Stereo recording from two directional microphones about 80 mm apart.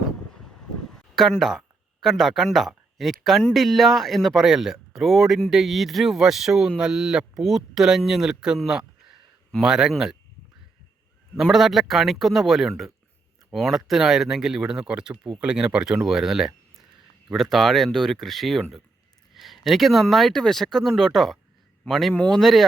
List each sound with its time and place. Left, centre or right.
1.1 s speech: centre
11.3 s speech: centre
22.1 s speech: centre
22.4 s speech: centre